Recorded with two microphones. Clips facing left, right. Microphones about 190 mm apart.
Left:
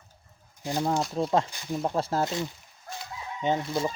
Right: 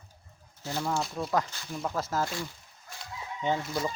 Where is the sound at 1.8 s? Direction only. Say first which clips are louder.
Left 3 dB; 30° left (ahead or behind).